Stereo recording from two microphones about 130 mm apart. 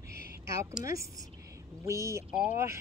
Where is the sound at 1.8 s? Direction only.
20° right (ahead or behind).